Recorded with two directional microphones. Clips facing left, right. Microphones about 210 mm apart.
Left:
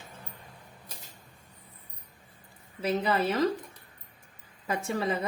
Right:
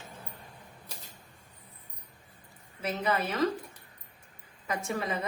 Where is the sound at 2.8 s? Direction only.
30° left (ahead or behind).